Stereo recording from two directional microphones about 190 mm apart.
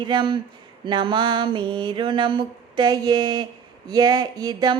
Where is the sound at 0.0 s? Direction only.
25° right (ahead or behind).